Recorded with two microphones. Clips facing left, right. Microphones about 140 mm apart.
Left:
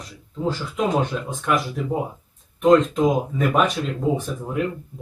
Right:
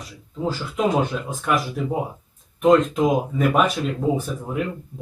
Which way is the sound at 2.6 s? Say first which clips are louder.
Left 1 dB; 5° right (ahead or behind).